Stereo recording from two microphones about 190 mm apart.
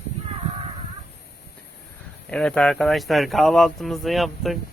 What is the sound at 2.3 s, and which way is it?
Speech, 5° left (ahead or behind).